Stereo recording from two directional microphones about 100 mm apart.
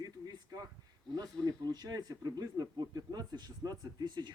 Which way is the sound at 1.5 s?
40° right (ahead or behind).